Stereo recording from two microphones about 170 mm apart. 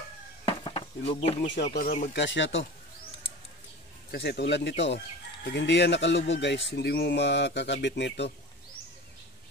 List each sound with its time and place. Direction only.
0.5 s a sound: 35° left (ahead or behind)
2.1 s speech: 90° left
4.1 s speech: 80° left